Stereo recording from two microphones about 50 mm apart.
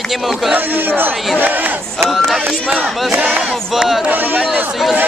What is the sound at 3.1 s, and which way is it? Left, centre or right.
Speech, right.